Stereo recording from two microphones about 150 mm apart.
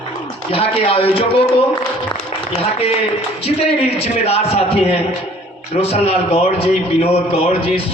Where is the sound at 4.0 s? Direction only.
40° left (ahead or behind).